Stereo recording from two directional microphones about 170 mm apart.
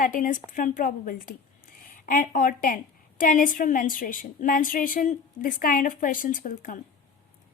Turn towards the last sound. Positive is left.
turn(degrees=55)  # may be behind; listen again after turning